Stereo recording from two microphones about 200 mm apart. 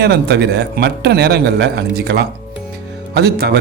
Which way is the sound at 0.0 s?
55° right (ahead or behind).